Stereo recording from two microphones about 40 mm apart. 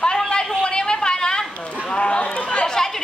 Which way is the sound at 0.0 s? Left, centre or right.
Centre.